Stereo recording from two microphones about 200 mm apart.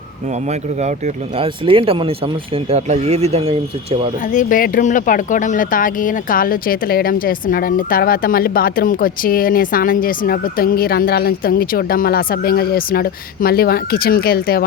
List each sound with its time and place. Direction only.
0.4 s speech: 35° right (ahead or behind)
4.2 s speech: 40° left (ahead or behind)